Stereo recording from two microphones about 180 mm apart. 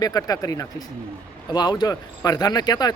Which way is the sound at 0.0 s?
20° left (ahead or behind).